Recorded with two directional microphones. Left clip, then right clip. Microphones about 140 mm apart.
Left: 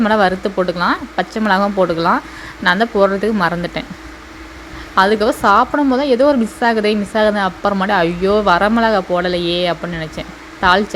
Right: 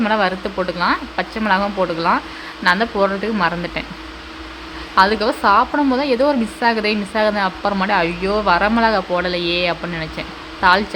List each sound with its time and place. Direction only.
0.0 s speech: 45° left (ahead or behind)
4.9 s a woman's voice: 40° left (ahead or behind)